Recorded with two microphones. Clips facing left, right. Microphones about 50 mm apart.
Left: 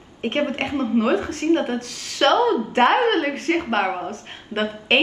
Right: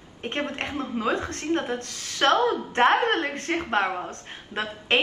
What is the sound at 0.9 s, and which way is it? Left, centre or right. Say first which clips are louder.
A woman's voice: left 6 dB; left.